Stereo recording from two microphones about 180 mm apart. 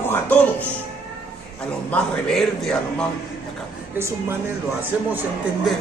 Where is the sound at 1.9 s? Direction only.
Centre (ahead or behind).